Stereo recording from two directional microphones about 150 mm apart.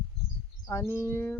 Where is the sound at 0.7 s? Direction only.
15° left (ahead or behind).